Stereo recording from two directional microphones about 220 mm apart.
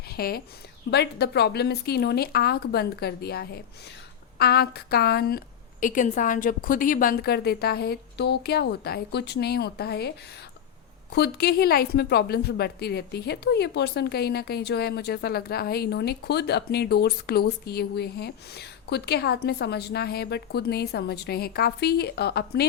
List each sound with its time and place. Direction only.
0.1 s a woman's voice: 45° left (ahead or behind)
11.1 s a woman's voice: 45° left (ahead or behind)